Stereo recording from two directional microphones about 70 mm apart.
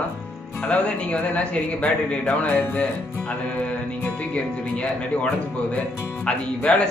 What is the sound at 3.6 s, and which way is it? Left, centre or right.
Music, centre.